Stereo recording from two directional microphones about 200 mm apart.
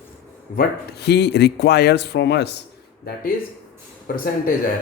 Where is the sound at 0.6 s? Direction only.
55° left (ahead or behind).